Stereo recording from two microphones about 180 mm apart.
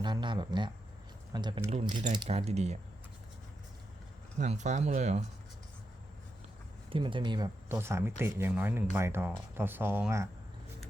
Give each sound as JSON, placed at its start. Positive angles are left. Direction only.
{"t": 0.0, "sound": "speech", "side_deg": -25}
{"t": 4.4, "sound": "speech", "side_deg": -40}
{"t": 6.9, "sound": "speech", "side_deg": -25}